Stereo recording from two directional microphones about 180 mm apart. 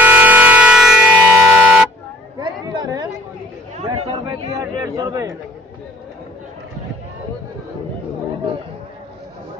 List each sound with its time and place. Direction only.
0.0 s civil defense siren: 10° right (ahead or behind)
2.4 s chatter: 25° right (ahead or behind)
3.7 s chatter: 35° right (ahead or behind)
4.5 s speech: 20° right (ahead or behind)